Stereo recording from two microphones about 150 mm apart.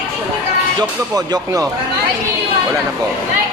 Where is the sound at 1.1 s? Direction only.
25° right (ahead or behind).